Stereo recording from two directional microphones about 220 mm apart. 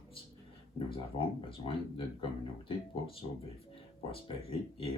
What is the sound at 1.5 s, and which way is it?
Speech, 25° left (ahead or behind).